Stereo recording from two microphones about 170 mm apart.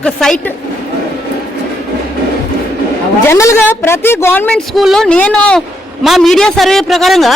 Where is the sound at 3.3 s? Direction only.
15° left (ahead or behind); by 7.3 s centre (ahead or behind).